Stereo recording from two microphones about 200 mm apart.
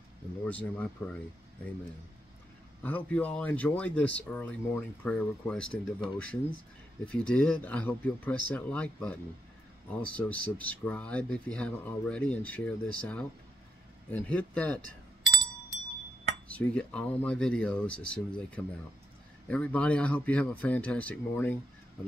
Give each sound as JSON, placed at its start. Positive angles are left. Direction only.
{"t": 0.5, "sound": "speech", "side_deg": 5}
{"t": 2.8, "sound": "speech", "side_deg": 10}
{"t": 16.4, "sound": "speech", "side_deg": 5}